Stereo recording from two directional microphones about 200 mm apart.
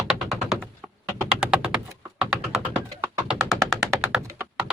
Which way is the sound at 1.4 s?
5° right (ahead or behind).